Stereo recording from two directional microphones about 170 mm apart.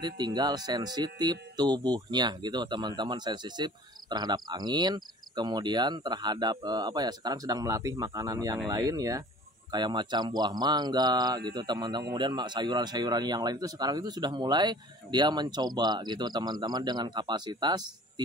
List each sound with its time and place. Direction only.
0.0 s speech: 25° right (ahead or behind)